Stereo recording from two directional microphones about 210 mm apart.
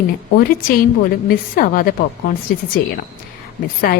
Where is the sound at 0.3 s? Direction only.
45° left (ahead or behind).